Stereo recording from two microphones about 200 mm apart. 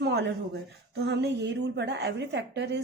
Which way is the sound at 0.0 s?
55° right (ahead or behind).